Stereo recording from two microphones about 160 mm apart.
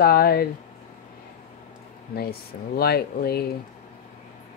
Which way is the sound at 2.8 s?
75° left (ahead or behind).